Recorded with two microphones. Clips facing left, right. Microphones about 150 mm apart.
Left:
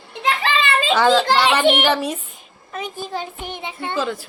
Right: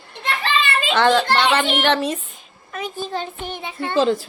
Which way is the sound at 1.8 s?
10° left (ahead or behind).